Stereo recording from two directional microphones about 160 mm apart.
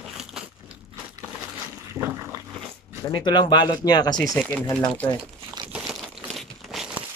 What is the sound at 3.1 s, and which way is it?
Speech, 30° left (ahead or behind).